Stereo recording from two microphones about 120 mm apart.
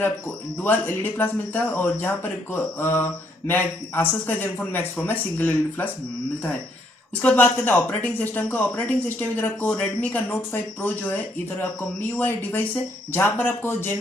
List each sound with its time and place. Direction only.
0.6 s speech: 15° left (ahead or behind)
7.2 s speech: 15° left (ahead or behind)
12.2 s speech: 15° left (ahead or behind)